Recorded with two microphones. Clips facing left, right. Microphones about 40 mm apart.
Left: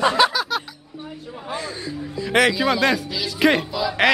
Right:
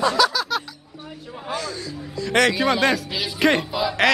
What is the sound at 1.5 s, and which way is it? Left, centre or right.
Speech, left.